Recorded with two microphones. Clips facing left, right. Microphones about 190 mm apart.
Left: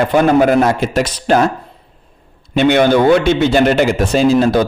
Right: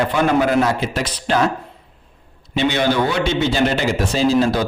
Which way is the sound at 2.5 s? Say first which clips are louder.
Left 7 dB; 55° left (ahead or behind).